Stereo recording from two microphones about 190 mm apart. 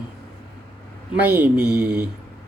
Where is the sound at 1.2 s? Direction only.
10° right (ahead or behind).